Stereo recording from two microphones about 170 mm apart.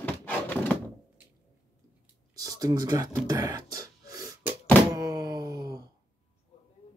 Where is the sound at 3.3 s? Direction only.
20° right (ahead or behind).